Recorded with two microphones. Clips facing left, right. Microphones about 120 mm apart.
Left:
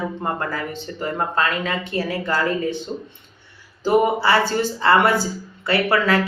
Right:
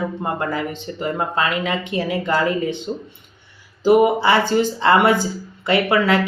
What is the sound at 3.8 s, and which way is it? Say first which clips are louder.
Speech: right 3 dB; 15° right (ahead or behind).